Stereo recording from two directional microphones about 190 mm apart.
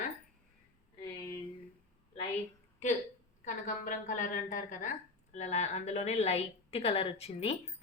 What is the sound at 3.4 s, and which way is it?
A woman's voice, 45° left (ahead or behind).